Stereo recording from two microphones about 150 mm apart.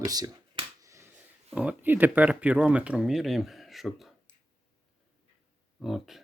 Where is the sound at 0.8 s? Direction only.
20° right (ahead or behind).